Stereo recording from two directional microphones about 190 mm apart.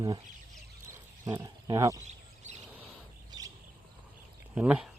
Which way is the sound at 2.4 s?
40° right (ahead or behind).